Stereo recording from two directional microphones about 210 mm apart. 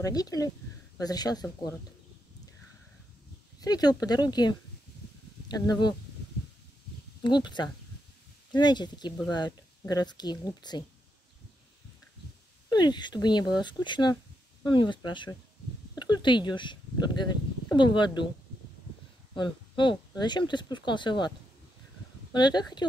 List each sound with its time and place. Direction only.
0.0 s speech: 15° left (ahead or behind)
3.6 s speech: 20° left (ahead or behind)
7.2 s speech: 20° left (ahead or behind)
12.6 s speech: 20° left (ahead or behind)
19.3 s speech: 20° left (ahead or behind)
22.3 s speech: 20° left (ahead or behind)